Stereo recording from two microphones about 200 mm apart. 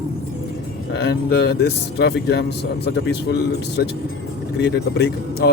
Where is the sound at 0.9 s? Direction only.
55° left (ahead or behind).